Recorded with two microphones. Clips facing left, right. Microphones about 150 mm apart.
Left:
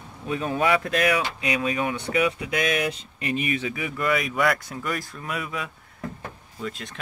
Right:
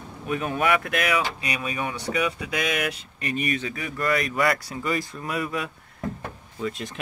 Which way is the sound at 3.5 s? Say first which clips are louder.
Left 1 dB; 10° left (ahead or behind).